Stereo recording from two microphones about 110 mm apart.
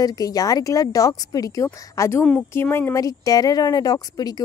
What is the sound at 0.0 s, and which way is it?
Speech, 35° left (ahead or behind).